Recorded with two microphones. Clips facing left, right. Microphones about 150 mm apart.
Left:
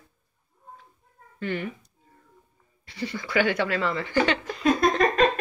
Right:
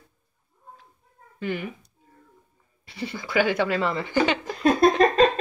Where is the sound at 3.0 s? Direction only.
25° right (ahead or behind).